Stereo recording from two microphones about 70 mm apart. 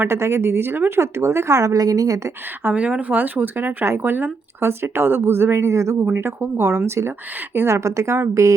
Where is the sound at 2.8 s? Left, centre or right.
Centre.